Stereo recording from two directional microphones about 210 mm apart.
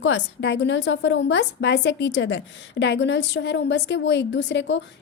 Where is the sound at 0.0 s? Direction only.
55° left (ahead or behind).